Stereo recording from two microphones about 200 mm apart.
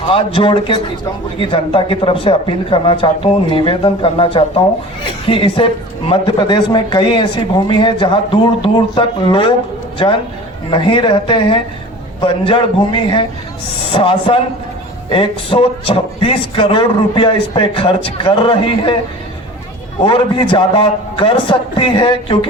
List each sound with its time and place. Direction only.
0.1 s speech: 25° left (ahead or behind)
10.7 s speech: 25° left (ahead or behind)
20.1 s speech: 25° left (ahead or behind)